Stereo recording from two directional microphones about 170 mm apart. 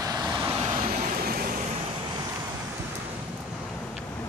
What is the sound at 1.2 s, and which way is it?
Vehicle, 60° right (ahead or behind).